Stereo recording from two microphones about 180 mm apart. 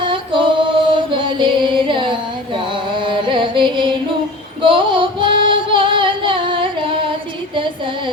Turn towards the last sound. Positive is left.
turn(degrees=-30)  # may be behind; listen again after turning